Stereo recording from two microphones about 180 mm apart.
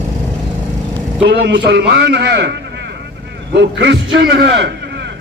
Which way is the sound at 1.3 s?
75° right (ahead or behind).